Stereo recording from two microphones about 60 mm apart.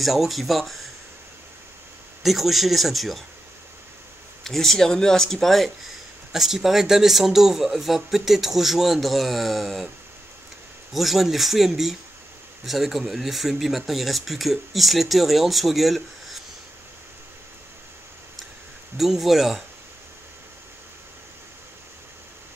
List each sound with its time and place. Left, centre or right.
0.0 s speech: centre
2.2 s speech: centre
4.5 s speech: centre
10.9 s speech: centre
18.9 s speech: centre